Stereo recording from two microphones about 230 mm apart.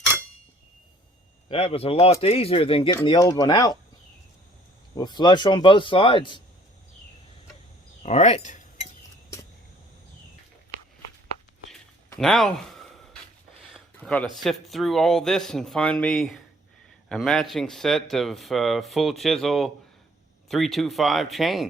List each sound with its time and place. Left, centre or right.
1.5 s speech: left
4.9 s speech: centre
8.0 s cutlery: left
12.2 s speech: centre
13.7 s a sound: centre
14.4 s speech: centre